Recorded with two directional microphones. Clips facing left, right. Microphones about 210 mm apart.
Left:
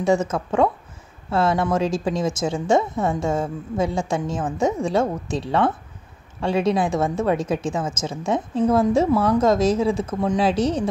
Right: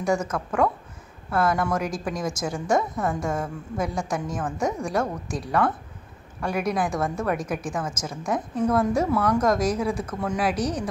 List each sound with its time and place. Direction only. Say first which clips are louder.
0.0 s a woman's voice: left 5 dB; 25° left (ahead or behind)